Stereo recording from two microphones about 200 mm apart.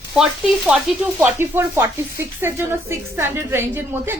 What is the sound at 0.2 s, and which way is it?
Speech, centre (ahead or behind).